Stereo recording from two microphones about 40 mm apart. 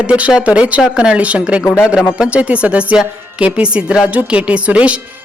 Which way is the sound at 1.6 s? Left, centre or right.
Left.